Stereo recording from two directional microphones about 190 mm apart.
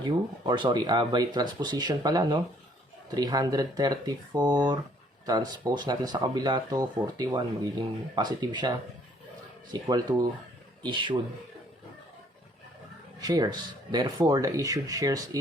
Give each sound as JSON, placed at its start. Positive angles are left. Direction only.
{"t": 0.0, "sound": "speech", "side_deg": -25}
{"t": 9.8, "sound": "speech", "side_deg": -20}
{"t": 13.1, "sound": "speech", "side_deg": -20}